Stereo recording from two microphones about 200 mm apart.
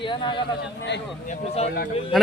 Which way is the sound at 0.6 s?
60° left (ahead or behind).